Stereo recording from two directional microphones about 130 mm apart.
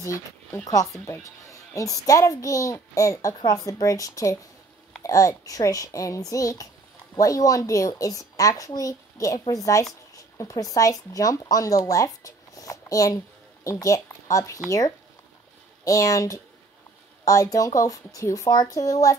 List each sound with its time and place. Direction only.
0.0 s a woman's voice: 20° left (ahead or behind)
15.8 s a woman's voice: 25° left (ahead or behind)